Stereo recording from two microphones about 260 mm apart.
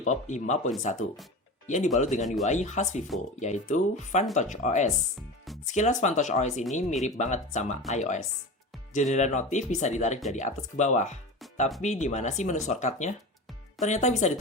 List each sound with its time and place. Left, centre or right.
0.0 s speech: left